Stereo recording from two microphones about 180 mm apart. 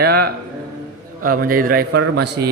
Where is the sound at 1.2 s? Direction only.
50° right (ahead or behind).